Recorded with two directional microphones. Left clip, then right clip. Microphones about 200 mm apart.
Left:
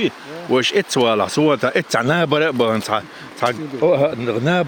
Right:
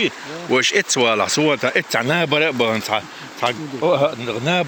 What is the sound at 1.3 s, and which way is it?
Speech, 40° left (ahead or behind).